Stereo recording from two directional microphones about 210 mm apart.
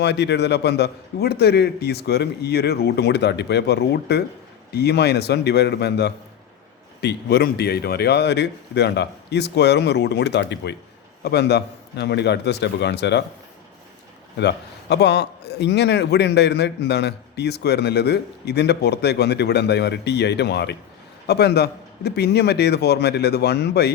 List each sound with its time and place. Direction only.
0.0 s a man's voice: 55° left (ahead or behind)
14.3 s a man's voice: 55° left (ahead or behind)